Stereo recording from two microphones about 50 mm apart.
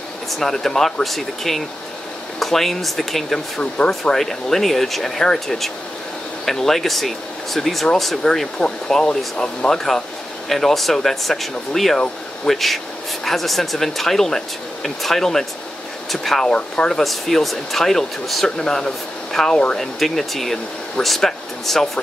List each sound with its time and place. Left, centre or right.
0.4 s speech: centre
3.7 s speech: centre
4.1 s speech: centre
8.2 s speech: centre
16.5 s speech: centre
16.9 s speech: centre
20.0 s speech: centre